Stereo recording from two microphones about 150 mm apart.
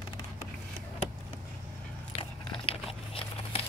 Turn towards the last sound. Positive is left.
turn(degrees=40)  # may be behind; listen again after turning